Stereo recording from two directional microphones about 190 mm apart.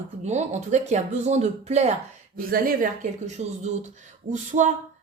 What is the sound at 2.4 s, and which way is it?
Speech, 50° right (ahead or behind).